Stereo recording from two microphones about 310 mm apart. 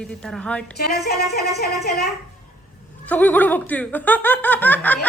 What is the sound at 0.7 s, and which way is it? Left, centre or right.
Speech, left.